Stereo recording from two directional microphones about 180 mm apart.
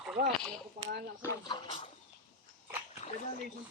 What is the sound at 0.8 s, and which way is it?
Speech, 45° right (ahead or behind).